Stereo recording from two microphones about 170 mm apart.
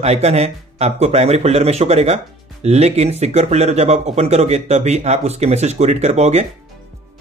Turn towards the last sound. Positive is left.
turn(degrees=-40)  # may be behind; listen again after turning